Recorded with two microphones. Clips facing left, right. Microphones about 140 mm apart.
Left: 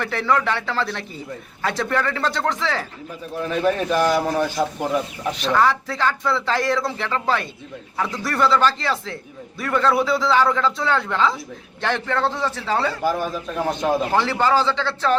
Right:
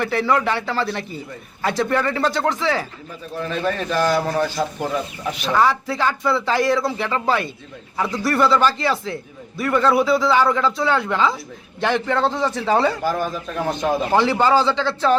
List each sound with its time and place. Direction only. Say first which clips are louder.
0.0 s a man's voice: right 2 dB; 5° right (ahead or behind)
3.4 s a man's voice: left 3 dB; 10° left (ahead or behind)
5.3 s a man's voice: right 1 dB; 5° right (ahead or behind)
13.3 s speech: even; 5° left (ahead or behind)
14.1 s a man's voice: right 6 dB; 15° right (ahead or behind)